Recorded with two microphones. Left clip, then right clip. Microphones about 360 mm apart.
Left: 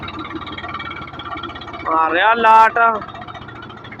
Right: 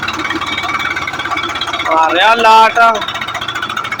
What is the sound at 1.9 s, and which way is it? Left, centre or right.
Speech, left.